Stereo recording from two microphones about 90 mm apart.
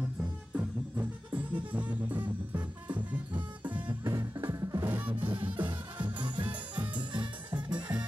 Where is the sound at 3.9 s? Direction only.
45° right (ahead or behind).